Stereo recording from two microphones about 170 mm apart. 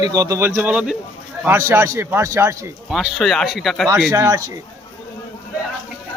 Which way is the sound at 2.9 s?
Centre (ahead or behind).